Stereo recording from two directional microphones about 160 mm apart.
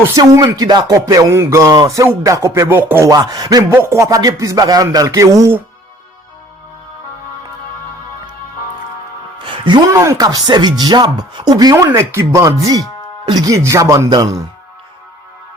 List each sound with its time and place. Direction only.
0.1 s speech: 20° right (ahead or behind)
9.4 s speech: 30° right (ahead or behind)